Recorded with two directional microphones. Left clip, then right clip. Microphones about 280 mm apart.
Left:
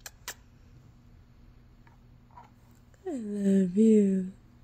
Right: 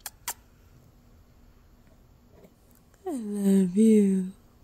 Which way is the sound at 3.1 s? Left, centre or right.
Centre.